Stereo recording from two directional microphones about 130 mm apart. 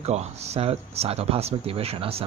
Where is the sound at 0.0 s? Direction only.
55° right (ahead or behind).